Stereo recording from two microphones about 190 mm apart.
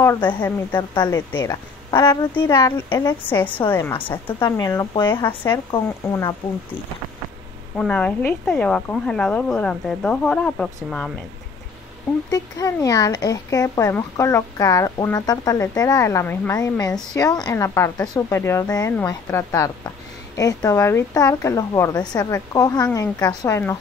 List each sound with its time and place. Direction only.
0.0 s a woman's voice: 20° left (ahead or behind)
5.2 s speech: 10° left (ahead or behind)
7.7 s speech: 5° left (ahead or behind)
12.3 s a woman's voice: 20° left (ahead or behind)